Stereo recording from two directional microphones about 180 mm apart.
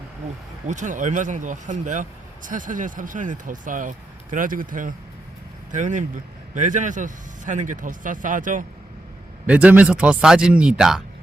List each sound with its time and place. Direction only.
0.7 s speech: 45° right (ahead or behind)
9.5 s speech: 10° right (ahead or behind)